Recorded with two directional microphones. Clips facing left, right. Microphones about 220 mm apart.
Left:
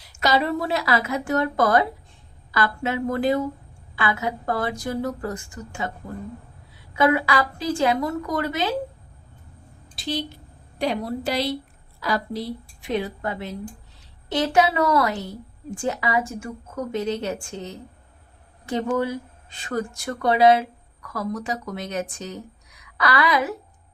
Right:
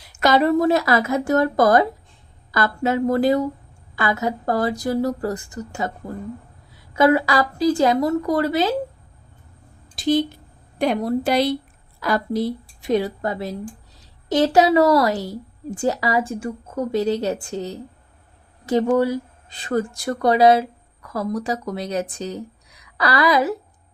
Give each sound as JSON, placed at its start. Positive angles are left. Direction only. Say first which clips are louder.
{"t": 0.1, "sound": "a woman's voice", "louder": "right 5 dB", "side_deg": -50}
{"t": 6.9, "sound": "a woman's voice", "louder": "right 4 dB", "side_deg": -40}
{"t": 9.9, "sound": "a sound", "louder": "right 9 dB", "side_deg": -50}
{"t": 10.8, "sound": "a woman's voice", "louder": "right 5 dB", "side_deg": -50}
{"t": 12.9, "sound": "a woman's voice", "louder": "right 5 dB", "side_deg": -35}